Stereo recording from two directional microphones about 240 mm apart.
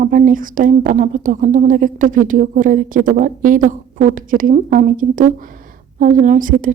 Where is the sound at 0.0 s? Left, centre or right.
Right.